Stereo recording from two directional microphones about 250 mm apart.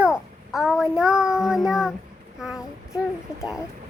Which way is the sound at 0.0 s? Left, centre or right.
Centre.